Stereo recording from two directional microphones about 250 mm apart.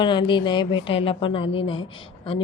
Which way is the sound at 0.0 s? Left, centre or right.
Centre.